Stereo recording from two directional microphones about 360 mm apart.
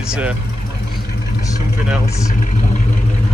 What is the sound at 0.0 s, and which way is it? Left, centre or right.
Speech, centre.